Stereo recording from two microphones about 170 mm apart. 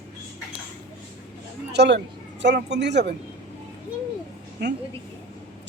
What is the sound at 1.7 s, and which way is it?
Speech, 80° right.